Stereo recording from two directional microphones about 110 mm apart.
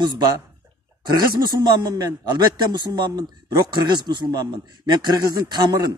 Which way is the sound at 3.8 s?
45° right (ahead or behind).